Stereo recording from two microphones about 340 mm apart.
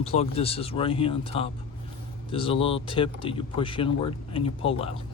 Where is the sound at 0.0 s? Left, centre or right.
Centre.